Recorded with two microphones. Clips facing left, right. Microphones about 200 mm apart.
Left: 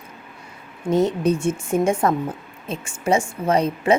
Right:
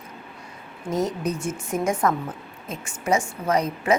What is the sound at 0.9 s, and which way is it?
A woman's voice, 30° left (ahead or behind).